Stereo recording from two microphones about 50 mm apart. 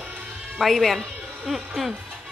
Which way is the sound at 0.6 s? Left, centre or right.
Centre.